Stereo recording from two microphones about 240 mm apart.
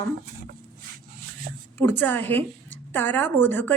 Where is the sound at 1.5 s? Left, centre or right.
Right.